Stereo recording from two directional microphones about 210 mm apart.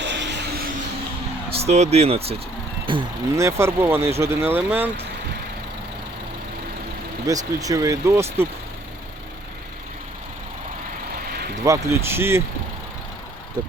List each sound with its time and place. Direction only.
0.0 s vehicle: 55° right (ahead or behind)
1.5 s speech: 30° right (ahead or behind); by 4.9 s 10° right (ahead or behind)
7.3 s speech: 15° right (ahead or behind)
11.3 s vehicle: 45° right (ahead or behind)
11.6 s speech: 15° right (ahead or behind)